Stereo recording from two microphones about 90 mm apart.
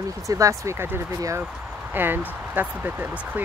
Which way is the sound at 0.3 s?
35° right (ahead or behind).